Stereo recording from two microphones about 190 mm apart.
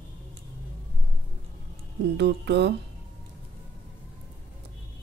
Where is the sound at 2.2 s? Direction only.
65° right (ahead or behind).